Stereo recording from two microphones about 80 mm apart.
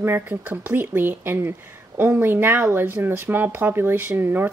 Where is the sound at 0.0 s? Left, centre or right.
Right.